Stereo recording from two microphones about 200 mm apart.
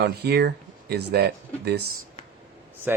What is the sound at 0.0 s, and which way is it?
Speech, 55° right (ahead or behind).